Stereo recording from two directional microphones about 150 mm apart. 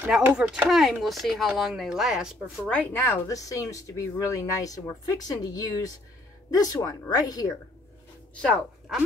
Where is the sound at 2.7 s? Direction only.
10° left (ahead or behind).